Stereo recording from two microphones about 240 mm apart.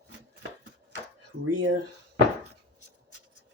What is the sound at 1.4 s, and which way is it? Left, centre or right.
Speech, right.